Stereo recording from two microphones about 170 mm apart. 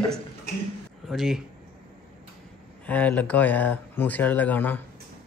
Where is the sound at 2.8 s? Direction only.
10° left (ahead or behind).